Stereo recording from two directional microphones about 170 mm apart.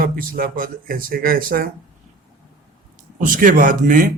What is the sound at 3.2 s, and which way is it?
Speech, 55° right (ahead or behind).